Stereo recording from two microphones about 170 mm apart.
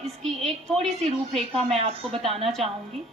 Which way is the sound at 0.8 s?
40° right (ahead or behind).